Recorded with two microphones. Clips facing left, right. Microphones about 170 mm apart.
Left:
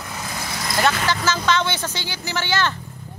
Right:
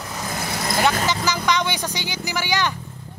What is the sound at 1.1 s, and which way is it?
Speech, 15° right (ahead or behind).